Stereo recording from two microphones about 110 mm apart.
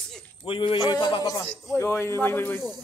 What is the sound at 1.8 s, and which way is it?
Speech, 25° left (ahead or behind).